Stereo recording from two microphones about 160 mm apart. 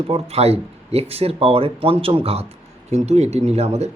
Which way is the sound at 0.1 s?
40° right (ahead or behind).